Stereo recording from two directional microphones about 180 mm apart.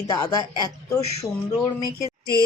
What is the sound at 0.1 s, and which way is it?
Speech, 20° left (ahead or behind).